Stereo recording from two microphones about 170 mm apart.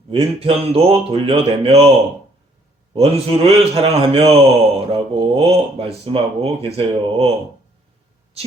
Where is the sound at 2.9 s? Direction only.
35° right (ahead or behind).